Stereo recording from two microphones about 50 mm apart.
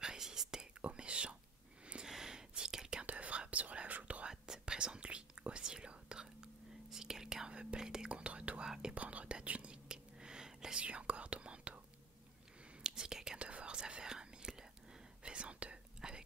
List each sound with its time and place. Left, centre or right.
0.0 s whispering: centre
2.0 s whispering: centre
3.1 s whispering: right
4.3 s whispering: centre
8.6 s whispering: centre
8.9 s whispering: right
12.8 s whispering: centre
13.4 s whispering: right